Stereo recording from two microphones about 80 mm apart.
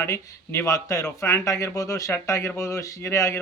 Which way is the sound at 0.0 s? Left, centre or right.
Left.